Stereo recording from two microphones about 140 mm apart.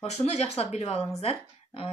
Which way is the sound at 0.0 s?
50° left (ahead or behind).